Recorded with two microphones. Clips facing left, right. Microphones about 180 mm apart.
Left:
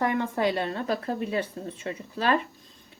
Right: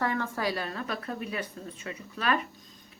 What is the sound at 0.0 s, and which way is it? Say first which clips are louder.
A woman's voice: left 5 dB; 20° left (ahead or behind).